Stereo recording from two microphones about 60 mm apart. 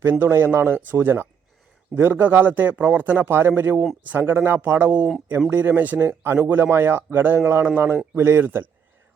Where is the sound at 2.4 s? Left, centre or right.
Right.